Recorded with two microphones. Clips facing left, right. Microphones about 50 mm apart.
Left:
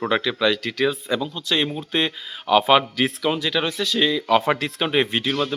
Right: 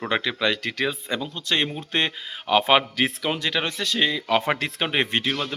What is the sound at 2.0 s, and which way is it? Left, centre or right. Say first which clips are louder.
Speech: left 3 dB; right.